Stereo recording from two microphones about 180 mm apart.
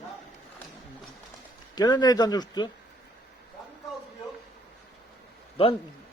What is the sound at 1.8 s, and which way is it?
Speech, 20° left (ahead or behind).